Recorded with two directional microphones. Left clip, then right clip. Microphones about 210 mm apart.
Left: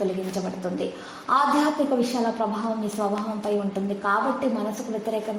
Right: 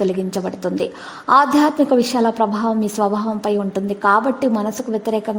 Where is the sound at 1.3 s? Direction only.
45° right (ahead or behind).